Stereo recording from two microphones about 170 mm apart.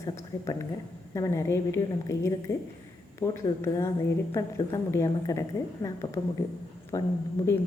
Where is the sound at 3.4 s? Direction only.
15° left (ahead or behind).